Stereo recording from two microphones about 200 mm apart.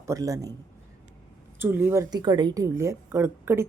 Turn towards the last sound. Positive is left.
turn(degrees=-15)  # may be behind; listen again after turning